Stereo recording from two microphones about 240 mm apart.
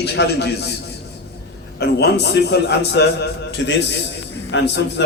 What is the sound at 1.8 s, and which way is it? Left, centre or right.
A man's voice, left.